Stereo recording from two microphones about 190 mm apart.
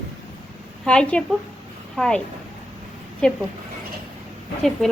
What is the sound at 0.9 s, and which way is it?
A woman's voice, 5° left (ahead or behind).